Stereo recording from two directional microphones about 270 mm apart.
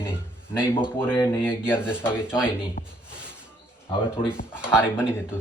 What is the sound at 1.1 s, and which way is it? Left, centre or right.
Speech, centre.